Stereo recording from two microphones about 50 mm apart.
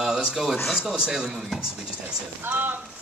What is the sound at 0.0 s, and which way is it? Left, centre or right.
Speech, centre.